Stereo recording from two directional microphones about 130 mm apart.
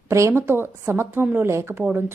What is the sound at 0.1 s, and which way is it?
A woman's voice, 20° right (ahead or behind).